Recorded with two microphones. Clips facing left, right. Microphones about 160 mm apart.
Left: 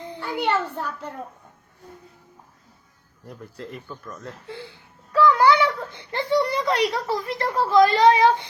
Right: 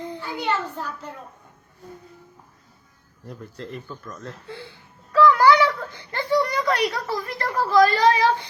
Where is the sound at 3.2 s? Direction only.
5° left (ahead or behind).